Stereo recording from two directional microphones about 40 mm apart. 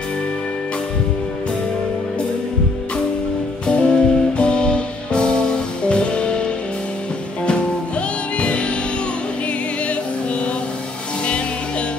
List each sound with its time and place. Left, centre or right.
3.6 s music: left
8.4 s music: left